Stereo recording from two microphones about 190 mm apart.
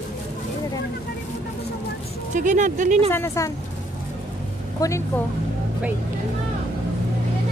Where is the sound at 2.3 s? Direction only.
40° right (ahead or behind).